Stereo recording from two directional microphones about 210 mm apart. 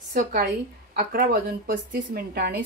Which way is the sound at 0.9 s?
45° right (ahead or behind).